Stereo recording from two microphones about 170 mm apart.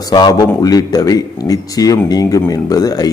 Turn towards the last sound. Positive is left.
turn(degrees=20)  # may be behind; listen again after turning